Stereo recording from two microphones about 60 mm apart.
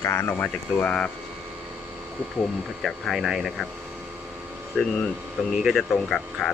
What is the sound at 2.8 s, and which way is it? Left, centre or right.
Speech, centre.